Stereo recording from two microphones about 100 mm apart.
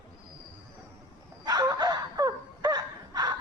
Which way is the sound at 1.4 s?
35° right (ahead or behind).